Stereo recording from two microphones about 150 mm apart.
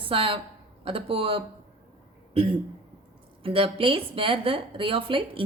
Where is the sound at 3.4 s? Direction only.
35° right (ahead or behind).